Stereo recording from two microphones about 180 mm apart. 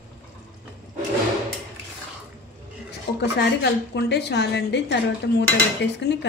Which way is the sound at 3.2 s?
70° left (ahead or behind).